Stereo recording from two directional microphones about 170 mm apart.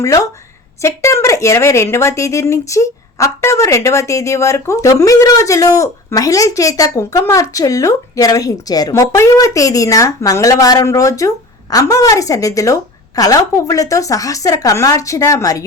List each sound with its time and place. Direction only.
0.0 s a woman's voice: 20° left (ahead or behind)